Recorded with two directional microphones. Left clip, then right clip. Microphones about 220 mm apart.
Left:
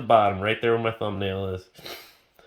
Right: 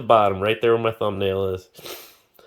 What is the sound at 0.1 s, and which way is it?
Speech, 35° right (ahead or behind).